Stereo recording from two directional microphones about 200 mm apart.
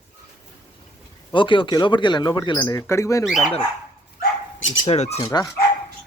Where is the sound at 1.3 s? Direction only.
25° left (ahead or behind).